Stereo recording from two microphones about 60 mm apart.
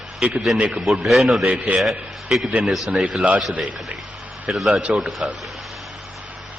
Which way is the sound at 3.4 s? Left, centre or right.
Centre.